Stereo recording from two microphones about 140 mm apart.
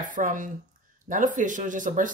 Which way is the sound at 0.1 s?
70° right (ahead or behind).